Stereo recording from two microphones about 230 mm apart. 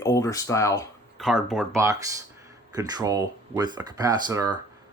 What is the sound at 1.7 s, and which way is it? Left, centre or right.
Speech, centre.